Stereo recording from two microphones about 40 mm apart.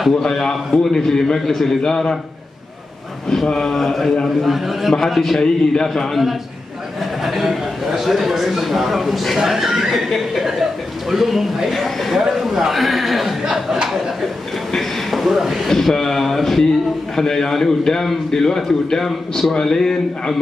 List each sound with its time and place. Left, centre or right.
0.1 s a man's voice: centre
1.8 s a man's voice: centre
3.4 s a man's voice: centre
5.4 s a man's voice: centre
7.2 s a man's voice: centre
14.7 s a sound: centre
15.7 s a man's voice: centre